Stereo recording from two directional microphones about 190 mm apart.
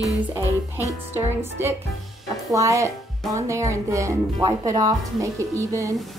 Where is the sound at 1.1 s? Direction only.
10° right (ahead or behind).